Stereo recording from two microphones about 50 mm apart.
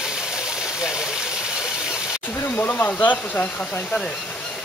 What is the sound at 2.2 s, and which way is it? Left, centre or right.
Speech, left.